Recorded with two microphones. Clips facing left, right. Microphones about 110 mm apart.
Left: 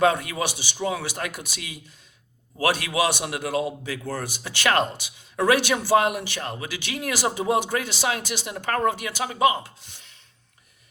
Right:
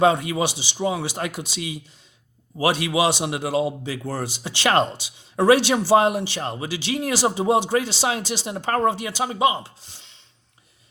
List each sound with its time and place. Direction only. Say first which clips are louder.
0.0 s a man's voice: right 3 dB; 25° right (ahead or behind)